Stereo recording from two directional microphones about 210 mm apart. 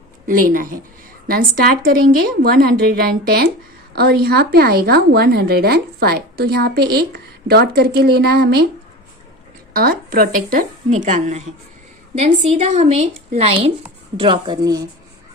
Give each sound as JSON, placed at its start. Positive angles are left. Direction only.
{"t": 0.3, "sound": "a woman's voice", "side_deg": -40}
{"t": 9.7, "sound": "a woman's voice", "side_deg": -45}